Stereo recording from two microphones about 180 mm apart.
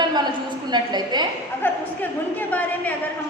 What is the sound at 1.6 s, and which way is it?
A woman's voice, 10° left (ahead or behind).